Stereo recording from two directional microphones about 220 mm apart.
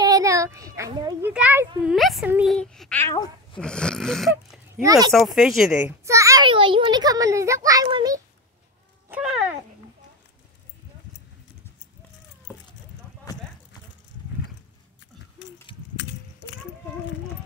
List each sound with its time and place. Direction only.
0.0 s a sound: 15° right (ahead or behind)
1.3 s a child's voice: 10° right (ahead or behind)
2.5 s a sound: centre (ahead or behind)
4.8 s a child's voice: 15° right (ahead or behind)
5.1 s a child's voice: centre (ahead or behind); by 8.2 s 15° right (ahead or behind)
9.1 s cat: 5° right (ahead or behind)